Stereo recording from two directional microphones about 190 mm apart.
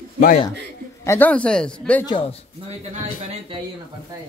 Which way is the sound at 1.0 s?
10° left (ahead or behind).